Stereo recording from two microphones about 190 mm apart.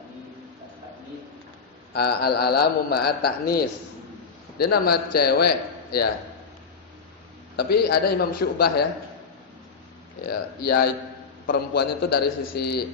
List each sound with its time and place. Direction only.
1.9 s a man's voice: 55° left (ahead or behind)
7.5 s a man's voice: 55° left (ahead or behind)
10.2 s a man's voice: 55° left (ahead or behind)